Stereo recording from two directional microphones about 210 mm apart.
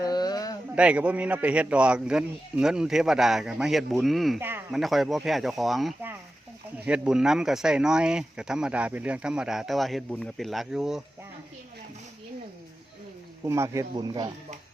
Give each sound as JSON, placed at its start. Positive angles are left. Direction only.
{"t": 0.0, "sound": "a sound", "side_deg": 20}
{"t": 0.8, "sound": "speech", "side_deg": -5}
{"t": 13.4, "sound": "speech", "side_deg": -15}